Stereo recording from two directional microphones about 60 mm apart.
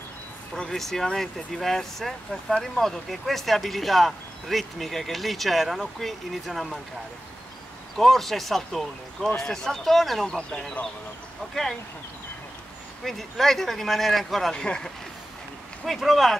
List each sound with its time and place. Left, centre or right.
0.6 s speech: centre
7.9 s speech: centre
13.0 s speech: centre
14.5 s speech: centre
15.8 s speech: centre